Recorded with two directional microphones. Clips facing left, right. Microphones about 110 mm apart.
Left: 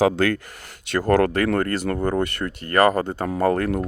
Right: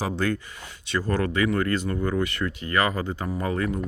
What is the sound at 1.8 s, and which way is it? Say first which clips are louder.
Speech: left 4 dB; 65° left (ahead or behind).